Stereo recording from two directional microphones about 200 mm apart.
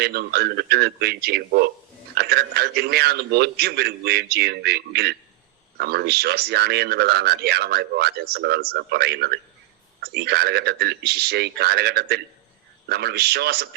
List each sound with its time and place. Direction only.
0.0 s speech: 55° right (ahead or behind)